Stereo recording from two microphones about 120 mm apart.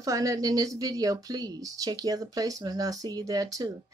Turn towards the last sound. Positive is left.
turn(degrees=-30)  # may be behind; listen again after turning